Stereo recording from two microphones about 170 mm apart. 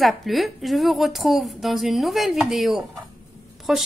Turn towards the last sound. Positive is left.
turn(degrees=-5)  # may be behind; listen again after turning